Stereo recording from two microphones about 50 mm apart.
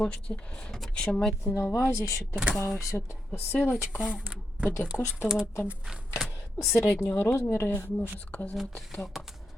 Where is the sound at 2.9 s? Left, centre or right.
Left.